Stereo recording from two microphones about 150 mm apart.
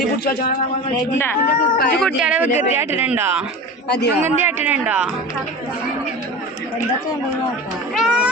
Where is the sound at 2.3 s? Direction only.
10° right (ahead or behind).